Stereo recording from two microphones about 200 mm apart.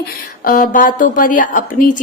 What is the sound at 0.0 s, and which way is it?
Speech, 45° left (ahead or behind).